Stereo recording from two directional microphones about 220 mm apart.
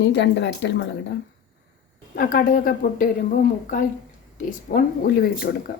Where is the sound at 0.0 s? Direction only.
50° left (ahead or behind).